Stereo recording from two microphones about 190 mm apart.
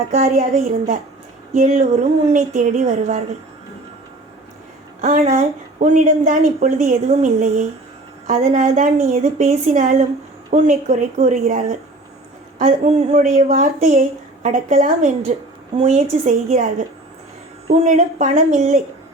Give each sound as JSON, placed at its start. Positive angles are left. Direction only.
{"t": 0.1, "sound": "speech", "side_deg": -40}
{"t": 4.9, "sound": "speech", "side_deg": -40}